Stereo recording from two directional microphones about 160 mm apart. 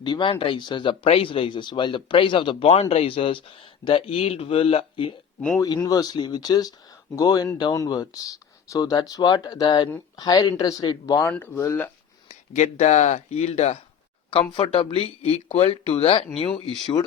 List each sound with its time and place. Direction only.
0.0 s speech: 30° left (ahead or behind)
5.5 s speech: 25° left (ahead or behind)
12.3 s speech: 45° left (ahead or behind)